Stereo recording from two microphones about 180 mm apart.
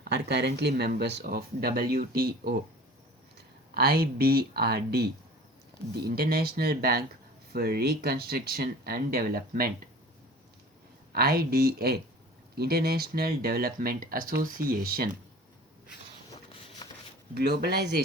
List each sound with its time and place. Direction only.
0.0 s speech: 65° right (ahead or behind)
3.8 s speech: 60° right (ahead or behind)
11.1 s speech: 60° right (ahead or behind)
16.8 s a sound: 25° left (ahead or behind)
17.3 s speech: 65° right (ahead or behind)